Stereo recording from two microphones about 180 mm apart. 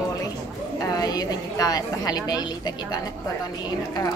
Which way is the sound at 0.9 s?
20° left (ahead or behind).